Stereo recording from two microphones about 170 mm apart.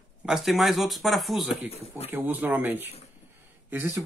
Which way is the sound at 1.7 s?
35° left (ahead or behind).